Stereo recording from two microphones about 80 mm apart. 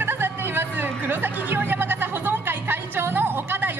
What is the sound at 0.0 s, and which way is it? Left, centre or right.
Chatter, right.